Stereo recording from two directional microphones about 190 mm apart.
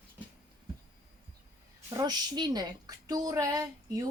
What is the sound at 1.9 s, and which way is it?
A woman's voice, 20° right (ahead or behind).